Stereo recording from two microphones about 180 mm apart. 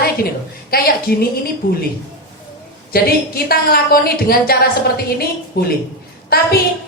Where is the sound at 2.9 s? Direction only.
55° left (ahead or behind).